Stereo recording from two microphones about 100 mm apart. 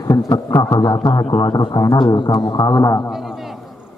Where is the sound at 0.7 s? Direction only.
45° left (ahead or behind).